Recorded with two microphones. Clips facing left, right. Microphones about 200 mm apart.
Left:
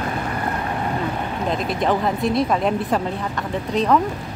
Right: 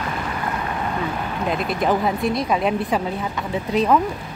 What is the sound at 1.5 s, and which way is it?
Speech, 5° right (ahead or behind).